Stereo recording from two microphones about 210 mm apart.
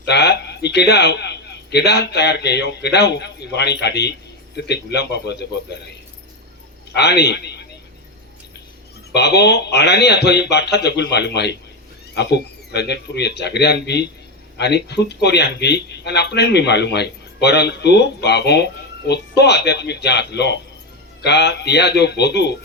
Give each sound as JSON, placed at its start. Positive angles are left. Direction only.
{"t": 0.1, "sound": "a man's voice", "side_deg": 55}
{"t": 6.9, "sound": "speech", "side_deg": 50}
{"t": 9.1, "sound": "speech", "side_deg": 50}